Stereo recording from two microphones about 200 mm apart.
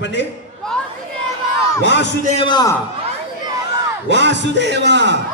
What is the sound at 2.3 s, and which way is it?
Speech, 25° left (ahead or behind).